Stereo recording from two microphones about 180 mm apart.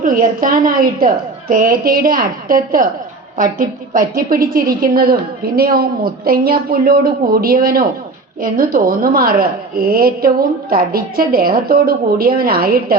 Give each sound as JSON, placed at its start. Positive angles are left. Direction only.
{"t": 0.0, "sound": "a woman's voice", "side_deg": -50}